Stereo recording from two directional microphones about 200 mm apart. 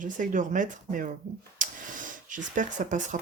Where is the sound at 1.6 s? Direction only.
40° right (ahead or behind).